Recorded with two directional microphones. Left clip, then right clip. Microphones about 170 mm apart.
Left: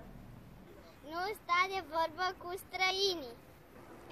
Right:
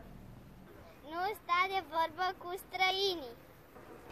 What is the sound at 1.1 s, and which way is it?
Speech, 5° left (ahead or behind).